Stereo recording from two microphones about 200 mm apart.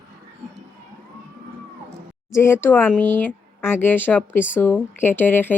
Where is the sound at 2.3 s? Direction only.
15° left (ahead or behind).